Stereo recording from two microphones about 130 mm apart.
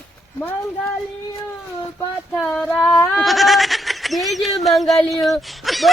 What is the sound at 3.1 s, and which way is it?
Goat, centre (ahead or behind).